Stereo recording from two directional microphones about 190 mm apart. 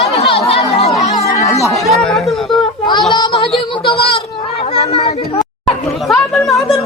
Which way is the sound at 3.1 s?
25° left (ahead or behind).